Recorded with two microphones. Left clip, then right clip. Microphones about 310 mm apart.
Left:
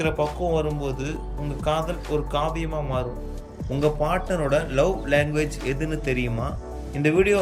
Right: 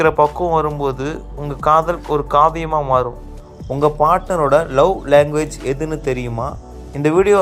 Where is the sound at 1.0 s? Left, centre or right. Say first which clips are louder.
Right 7 dB; centre.